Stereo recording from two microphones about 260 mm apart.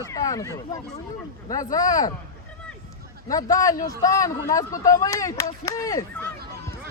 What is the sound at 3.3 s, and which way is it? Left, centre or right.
Speech, centre.